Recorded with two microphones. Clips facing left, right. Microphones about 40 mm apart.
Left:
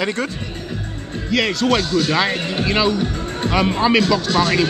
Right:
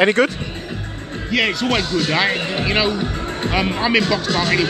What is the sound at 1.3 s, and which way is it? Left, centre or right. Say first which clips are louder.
Speech: left 1 dB; centre.